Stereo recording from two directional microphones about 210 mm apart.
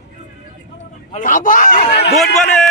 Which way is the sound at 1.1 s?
40° left (ahead or behind).